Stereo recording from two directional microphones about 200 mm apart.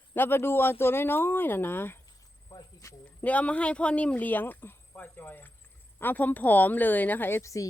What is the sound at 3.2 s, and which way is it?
Speech, 5° left (ahead or behind).